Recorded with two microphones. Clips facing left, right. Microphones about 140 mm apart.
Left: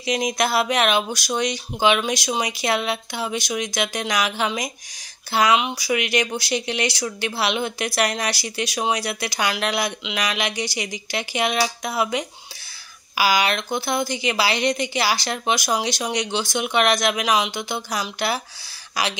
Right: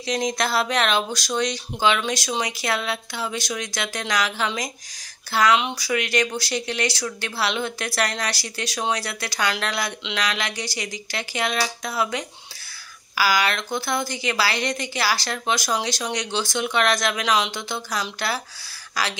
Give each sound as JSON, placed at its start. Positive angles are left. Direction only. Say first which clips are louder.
{"t": 0.0, "sound": "speech", "louder": "left 2 dB", "side_deg": 10}